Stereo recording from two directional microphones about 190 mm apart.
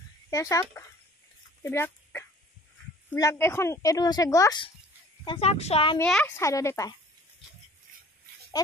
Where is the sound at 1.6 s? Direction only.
15° left (ahead or behind).